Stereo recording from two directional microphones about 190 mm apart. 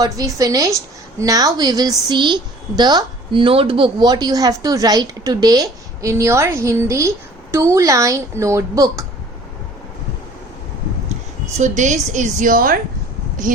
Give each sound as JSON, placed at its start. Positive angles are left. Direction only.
{"t": 0.0, "sound": "a woman's voice", "side_deg": -20}
{"t": 11.5, "sound": "a woman's voice", "side_deg": -40}